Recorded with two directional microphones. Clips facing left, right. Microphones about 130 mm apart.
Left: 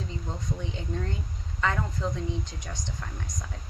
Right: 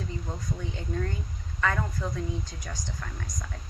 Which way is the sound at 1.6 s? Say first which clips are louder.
Even; 20° left (ahead or behind).